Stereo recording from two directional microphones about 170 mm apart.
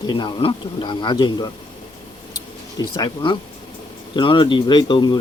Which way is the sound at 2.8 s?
25° left (ahead or behind).